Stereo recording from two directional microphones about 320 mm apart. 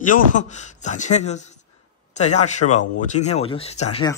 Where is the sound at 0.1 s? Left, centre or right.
Left.